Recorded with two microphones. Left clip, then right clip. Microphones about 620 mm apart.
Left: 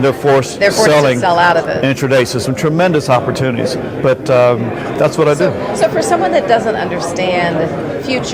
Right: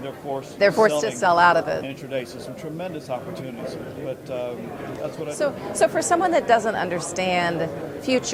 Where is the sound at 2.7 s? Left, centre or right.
Left.